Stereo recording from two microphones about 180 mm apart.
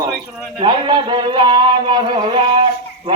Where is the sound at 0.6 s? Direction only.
25° right (ahead or behind).